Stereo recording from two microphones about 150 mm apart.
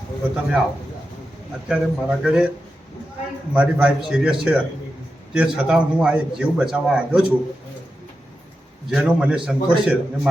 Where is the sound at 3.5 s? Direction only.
10° right (ahead or behind).